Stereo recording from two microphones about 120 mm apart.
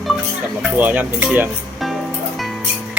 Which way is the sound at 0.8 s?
15° right (ahead or behind).